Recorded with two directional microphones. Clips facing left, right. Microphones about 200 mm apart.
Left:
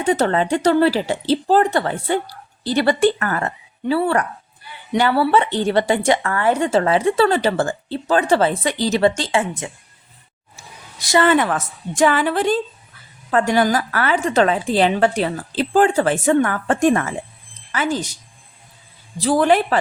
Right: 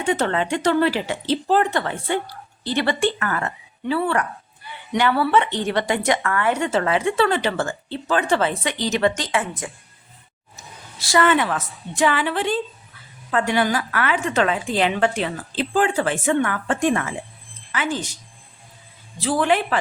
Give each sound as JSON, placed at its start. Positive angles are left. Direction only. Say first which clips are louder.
{"t": 0.0, "sound": "a woman's voice", "louder": "left 4 dB", "side_deg": 35}
{"t": 10.9, "sound": "a woman's voice", "louder": "left 3 dB", "side_deg": 20}
{"t": 11.3, "sound": "a woman's voice", "louder": "left 3 dB", "side_deg": 45}
{"t": 19.2, "sound": "a woman's voice", "louder": "left 4 dB", "side_deg": 40}